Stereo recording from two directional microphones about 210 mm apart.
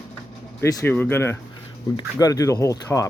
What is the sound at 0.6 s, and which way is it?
Speech, 15° left (ahead or behind).